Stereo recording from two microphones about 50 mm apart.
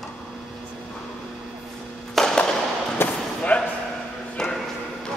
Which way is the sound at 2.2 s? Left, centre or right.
Centre.